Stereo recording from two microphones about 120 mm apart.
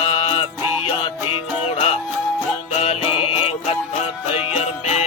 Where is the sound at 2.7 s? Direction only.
50° left (ahead or behind).